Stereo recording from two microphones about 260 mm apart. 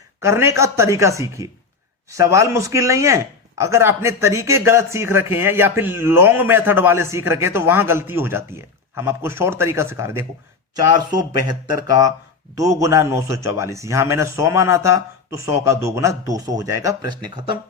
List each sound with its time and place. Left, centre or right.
0.2 s speech: centre
11.3 s speech: centre